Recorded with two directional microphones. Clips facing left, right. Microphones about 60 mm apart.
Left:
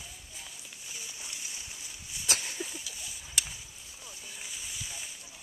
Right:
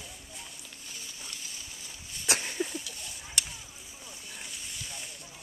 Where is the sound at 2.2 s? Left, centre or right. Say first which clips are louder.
Right 3 dB; right.